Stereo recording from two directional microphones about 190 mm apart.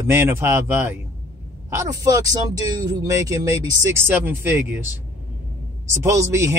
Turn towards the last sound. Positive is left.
turn(degrees=-15)  # may be behind; listen again after turning